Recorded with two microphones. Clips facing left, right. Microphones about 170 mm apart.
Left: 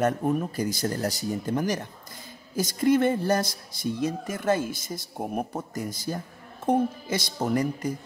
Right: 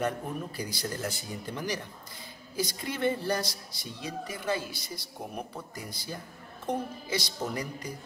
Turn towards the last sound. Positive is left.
turn(degrees=50)  # may be behind; listen again after turning